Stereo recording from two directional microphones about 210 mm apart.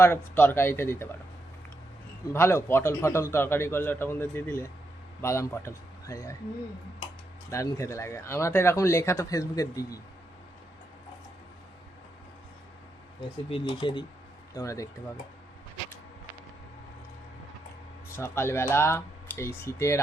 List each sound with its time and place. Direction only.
0.0 s speech: 10° left (ahead or behind)
2.3 s speech: 10° left (ahead or behind)
7.5 s speech: 15° left (ahead or behind)
13.5 s speech: 25° left (ahead or behind)
18.2 s speech: 10° left (ahead or behind)